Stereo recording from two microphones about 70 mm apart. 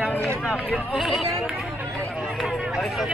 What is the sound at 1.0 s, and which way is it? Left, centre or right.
Speech, centre.